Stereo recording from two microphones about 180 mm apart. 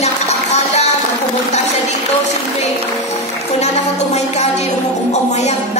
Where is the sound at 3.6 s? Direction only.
40° left (ahead or behind).